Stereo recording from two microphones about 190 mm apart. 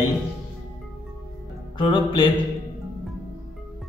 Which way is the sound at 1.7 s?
25° left (ahead or behind).